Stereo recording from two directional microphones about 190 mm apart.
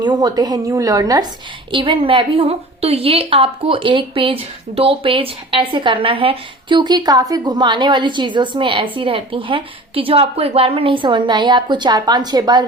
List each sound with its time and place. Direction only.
0.0 s a woman's voice: 20° right (ahead or behind)